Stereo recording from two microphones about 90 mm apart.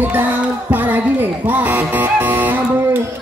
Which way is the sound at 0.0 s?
20° right (ahead or behind).